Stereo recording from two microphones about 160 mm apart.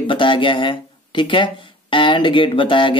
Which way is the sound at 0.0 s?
30° left (ahead or behind).